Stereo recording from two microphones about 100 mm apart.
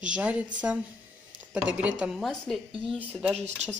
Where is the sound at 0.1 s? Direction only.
10° right (ahead or behind).